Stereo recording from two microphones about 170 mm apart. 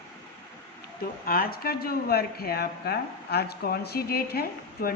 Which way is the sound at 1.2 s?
60° left (ahead or behind).